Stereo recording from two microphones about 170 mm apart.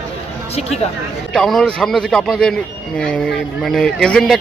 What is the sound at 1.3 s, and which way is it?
A man's voice, centre (ahead or behind).